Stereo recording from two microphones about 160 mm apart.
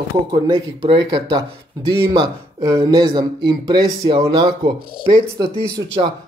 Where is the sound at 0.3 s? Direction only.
30° right (ahead or behind).